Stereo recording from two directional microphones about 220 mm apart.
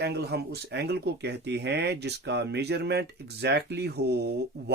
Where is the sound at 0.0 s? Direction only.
50° right (ahead or behind).